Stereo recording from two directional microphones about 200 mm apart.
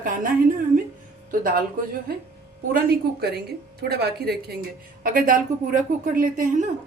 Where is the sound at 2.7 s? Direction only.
50° right (ahead or behind).